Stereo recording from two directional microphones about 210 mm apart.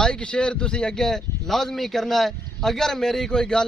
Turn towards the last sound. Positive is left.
turn(degrees=5)  # may be behind; listen again after turning